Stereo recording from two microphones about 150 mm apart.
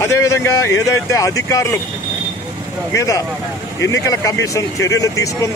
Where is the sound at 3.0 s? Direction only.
20° left (ahead or behind).